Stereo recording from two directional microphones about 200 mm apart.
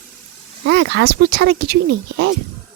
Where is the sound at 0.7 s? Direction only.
60° right (ahead or behind).